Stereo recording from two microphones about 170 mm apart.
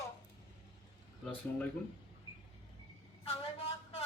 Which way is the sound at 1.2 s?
5° left (ahead or behind).